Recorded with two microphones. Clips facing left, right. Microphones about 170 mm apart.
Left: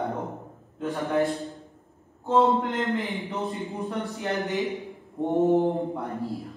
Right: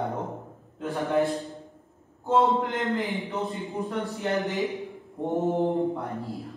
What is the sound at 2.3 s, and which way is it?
A man's voice, centre (ahead or behind).